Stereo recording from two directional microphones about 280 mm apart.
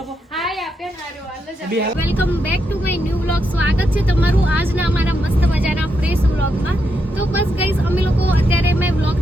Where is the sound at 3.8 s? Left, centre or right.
Centre.